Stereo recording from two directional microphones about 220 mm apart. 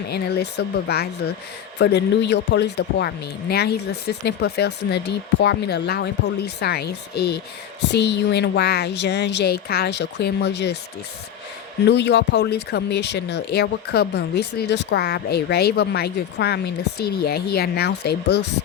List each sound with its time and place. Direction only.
0.1 s speech: 45° left (ahead or behind)
11.9 s speech: 50° left (ahead or behind)